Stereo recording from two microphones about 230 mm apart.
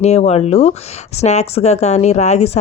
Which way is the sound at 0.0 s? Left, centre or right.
Left.